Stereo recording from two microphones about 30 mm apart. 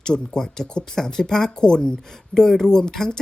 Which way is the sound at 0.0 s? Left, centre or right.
Left.